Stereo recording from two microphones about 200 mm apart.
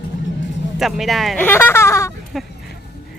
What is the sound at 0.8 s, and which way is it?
Speech, centre (ahead or behind).